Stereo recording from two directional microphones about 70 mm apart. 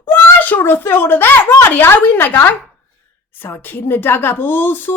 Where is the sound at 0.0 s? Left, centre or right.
Left.